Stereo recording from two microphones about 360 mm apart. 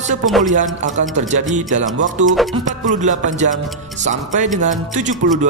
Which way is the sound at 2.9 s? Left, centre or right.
Right.